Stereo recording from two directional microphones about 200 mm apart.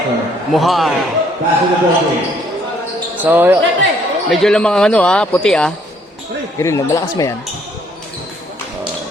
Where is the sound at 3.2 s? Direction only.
10° right (ahead or behind).